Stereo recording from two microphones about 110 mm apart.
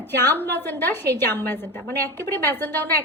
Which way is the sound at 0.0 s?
20° left (ahead or behind).